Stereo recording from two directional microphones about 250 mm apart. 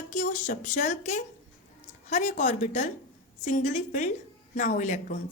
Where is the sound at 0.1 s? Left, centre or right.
Left.